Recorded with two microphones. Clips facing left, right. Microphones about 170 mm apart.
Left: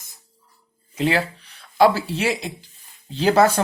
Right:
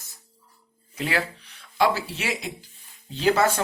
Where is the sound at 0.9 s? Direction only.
25° left (ahead or behind).